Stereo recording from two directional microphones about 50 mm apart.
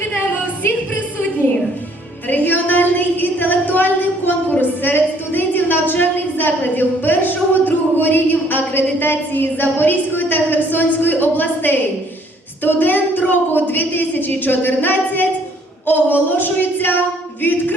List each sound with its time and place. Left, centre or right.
2.2 s a woman's voice: left